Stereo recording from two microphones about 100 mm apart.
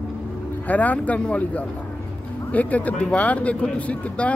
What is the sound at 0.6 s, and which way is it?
Speech, 15° left (ahead or behind).